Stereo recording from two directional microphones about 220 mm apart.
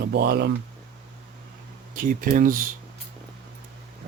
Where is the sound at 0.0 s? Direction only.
45° right (ahead or behind).